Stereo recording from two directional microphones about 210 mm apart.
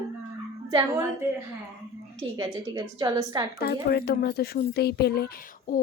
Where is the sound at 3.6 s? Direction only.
50° left (ahead or behind).